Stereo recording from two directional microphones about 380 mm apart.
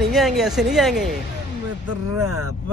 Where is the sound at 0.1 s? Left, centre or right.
Centre.